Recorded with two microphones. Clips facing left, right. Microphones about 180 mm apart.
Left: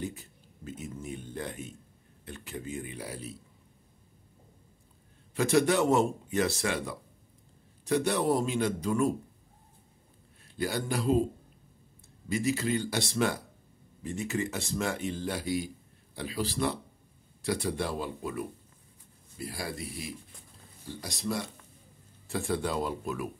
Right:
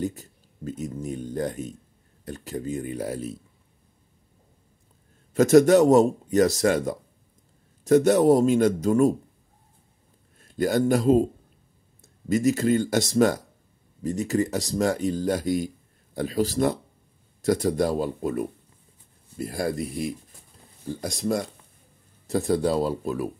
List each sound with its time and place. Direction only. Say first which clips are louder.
0.0 s speech: right 8 dB; 40° right (ahead or behind)
5.3 s speech: right 10 dB; 45° right (ahead or behind)
10.4 s a man's voice: right 10 dB; 45° right (ahead or behind)